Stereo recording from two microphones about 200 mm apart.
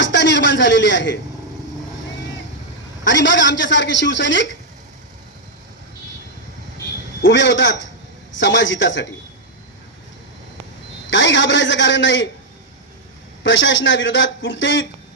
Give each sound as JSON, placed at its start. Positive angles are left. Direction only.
{"t": 0.0, "sound": "a sound", "side_deg": 65}
{"t": 3.0, "sound": "a man's voice", "side_deg": 65}
{"t": 7.3, "sound": "a man's voice", "side_deg": 65}
{"t": 11.1, "sound": "a man's voice", "side_deg": 65}
{"t": 13.4, "sound": "a man's voice", "side_deg": 65}